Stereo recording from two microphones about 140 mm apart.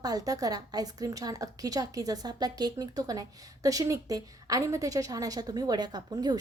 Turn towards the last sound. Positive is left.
turn(degrees=-30)  # may be behind; listen again after turning